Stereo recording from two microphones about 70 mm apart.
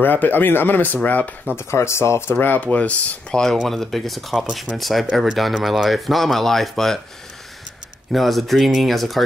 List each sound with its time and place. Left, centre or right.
0.0 s speech: left
1.6 s speech: left
2.3 s speech: left
3.6 s speech: centre
8.1 s speech: centre